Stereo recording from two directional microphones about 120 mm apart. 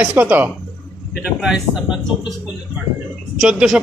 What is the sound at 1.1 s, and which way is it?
Speech, 5° right (ahead or behind).